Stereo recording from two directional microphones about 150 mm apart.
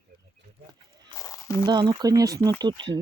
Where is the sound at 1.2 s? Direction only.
25° left (ahead or behind).